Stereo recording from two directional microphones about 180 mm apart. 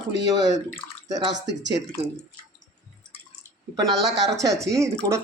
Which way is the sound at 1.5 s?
75° right (ahead or behind).